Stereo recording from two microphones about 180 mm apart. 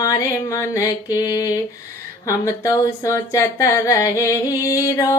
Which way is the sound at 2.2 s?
15° left (ahead or behind).